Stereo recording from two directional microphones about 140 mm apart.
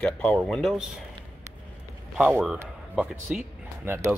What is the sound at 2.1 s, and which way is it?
Speech, 10° right (ahead or behind).